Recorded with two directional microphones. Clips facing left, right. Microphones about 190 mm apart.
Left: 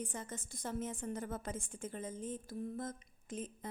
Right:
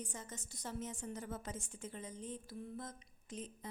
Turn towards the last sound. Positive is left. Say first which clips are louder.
# left 4 dB
turn(degrees=50)  # may be behind; listen again after turning